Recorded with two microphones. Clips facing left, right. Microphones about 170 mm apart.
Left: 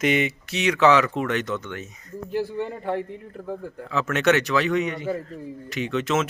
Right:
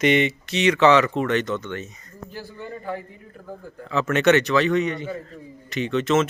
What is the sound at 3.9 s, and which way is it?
A man's voice, 5° left (ahead or behind).